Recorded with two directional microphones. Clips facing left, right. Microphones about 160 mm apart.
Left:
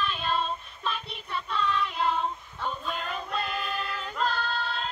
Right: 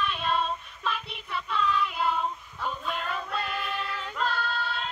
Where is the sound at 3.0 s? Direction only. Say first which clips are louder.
Even; 25° left (ahead or behind).